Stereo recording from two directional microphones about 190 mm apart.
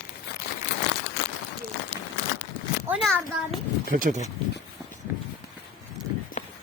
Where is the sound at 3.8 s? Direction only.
45° right (ahead or behind).